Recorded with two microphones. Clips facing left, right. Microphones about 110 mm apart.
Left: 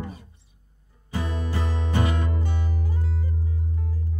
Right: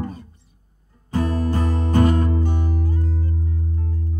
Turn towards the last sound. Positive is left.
turn(degrees=-45)  # may be behind; listen again after turning